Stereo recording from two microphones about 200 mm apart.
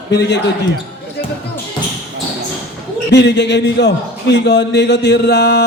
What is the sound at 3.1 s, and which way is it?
Speech, 60° left (ahead or behind).